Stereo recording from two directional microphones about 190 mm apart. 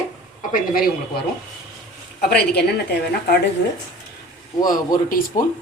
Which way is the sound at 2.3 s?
60° left (ahead or behind).